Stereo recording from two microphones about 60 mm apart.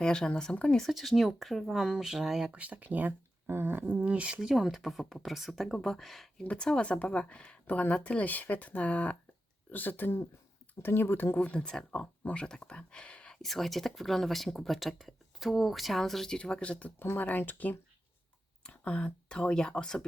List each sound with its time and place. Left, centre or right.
0.0 s a woman's voice: centre
0.8 s speech: centre
2.5 s speech: right
3.4 s a sound: right
3.8 s speech: right
4.4 s speech: centre
6.4 s a woman's voice: centre; by 11.3 s left
11.3 s speech: centre
13.4 s speech: centre
17.0 s speech: left; by 20.1 s centre